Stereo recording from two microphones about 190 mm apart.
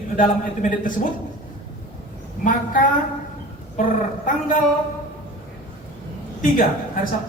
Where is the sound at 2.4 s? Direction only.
45° left (ahead or behind).